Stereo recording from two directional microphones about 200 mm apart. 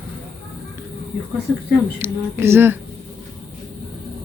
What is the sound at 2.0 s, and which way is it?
Speech, 10° right (ahead or behind).